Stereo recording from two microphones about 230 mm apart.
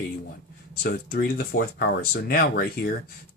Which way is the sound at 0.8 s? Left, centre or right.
Left.